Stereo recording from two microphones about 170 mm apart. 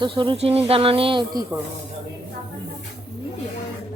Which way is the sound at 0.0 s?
30° right (ahead or behind).